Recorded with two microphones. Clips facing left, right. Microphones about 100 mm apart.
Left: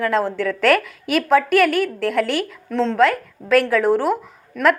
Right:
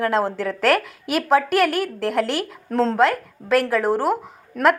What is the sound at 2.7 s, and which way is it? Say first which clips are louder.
Speech: right 1 dB; 40° right (ahead or behind).